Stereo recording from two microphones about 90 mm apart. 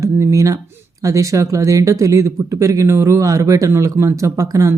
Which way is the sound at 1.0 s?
35° right (ahead or behind).